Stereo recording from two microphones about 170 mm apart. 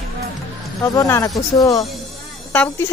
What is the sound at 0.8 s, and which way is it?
Speech, 20° left (ahead or behind).